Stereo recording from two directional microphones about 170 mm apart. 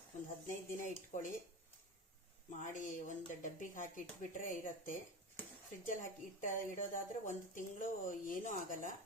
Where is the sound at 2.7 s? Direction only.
50° left (ahead or behind).